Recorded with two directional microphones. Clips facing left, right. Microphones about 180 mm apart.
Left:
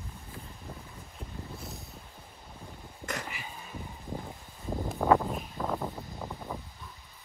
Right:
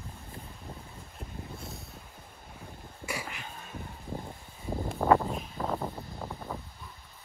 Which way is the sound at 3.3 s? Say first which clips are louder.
Even; 5° left (ahead or behind).